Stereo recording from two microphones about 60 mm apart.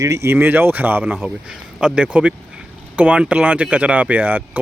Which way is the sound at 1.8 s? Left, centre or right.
Centre.